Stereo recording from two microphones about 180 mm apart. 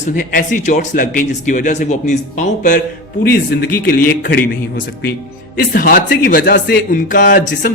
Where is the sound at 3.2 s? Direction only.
55° left (ahead or behind).